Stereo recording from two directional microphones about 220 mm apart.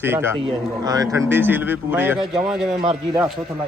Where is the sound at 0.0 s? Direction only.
10° right (ahead or behind).